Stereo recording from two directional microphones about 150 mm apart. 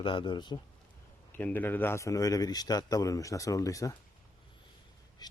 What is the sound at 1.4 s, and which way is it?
A man's voice, 10° left (ahead or behind).